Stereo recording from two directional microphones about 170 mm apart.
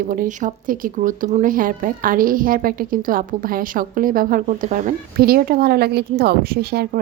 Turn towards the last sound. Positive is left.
turn(degrees=-65)  # may be behind; listen again after turning